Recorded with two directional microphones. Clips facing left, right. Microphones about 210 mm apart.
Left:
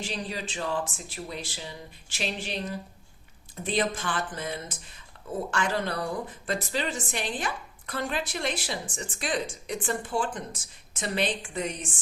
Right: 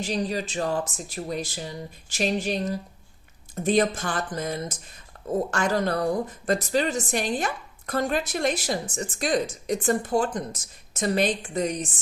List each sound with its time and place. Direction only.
0.0 s a woman's voice: 40° right (ahead or behind)